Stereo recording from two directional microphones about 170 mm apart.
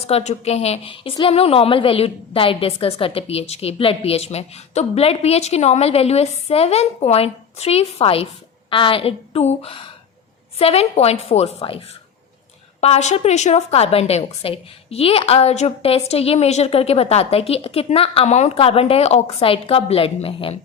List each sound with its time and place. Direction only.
0.0 s a woman's voice: 40° left (ahead or behind)
12.8 s a woman's voice: 40° left (ahead or behind)